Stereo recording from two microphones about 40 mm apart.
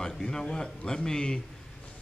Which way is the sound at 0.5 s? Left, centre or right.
Centre.